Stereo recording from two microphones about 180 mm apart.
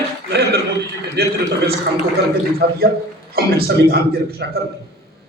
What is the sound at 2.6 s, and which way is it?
A man's voice, 65° right (ahead or behind).